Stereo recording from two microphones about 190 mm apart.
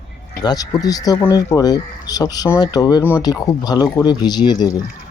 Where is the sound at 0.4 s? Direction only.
20° left (ahead or behind).